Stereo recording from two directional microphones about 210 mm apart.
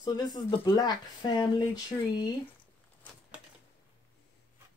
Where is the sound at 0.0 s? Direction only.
20° left (ahead or behind).